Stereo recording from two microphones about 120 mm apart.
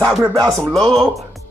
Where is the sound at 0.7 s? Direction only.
5° left (ahead or behind).